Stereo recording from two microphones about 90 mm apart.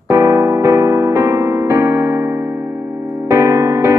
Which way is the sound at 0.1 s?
30° right (ahead or behind).